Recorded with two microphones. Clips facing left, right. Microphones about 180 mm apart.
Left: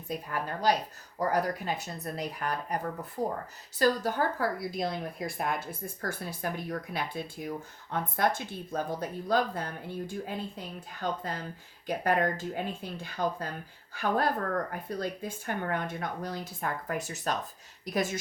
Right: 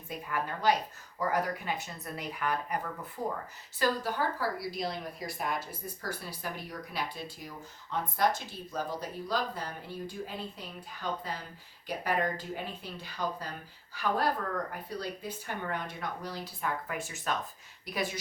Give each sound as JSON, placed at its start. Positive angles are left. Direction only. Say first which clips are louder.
{"t": 0.3, "sound": "a woman's voice", "louder": "even", "side_deg": 40}